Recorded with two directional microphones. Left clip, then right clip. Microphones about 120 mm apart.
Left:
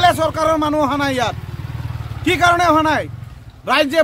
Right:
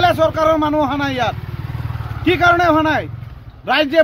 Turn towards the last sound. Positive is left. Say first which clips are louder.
# even
turn(degrees=35)  # may be behind; listen again after turning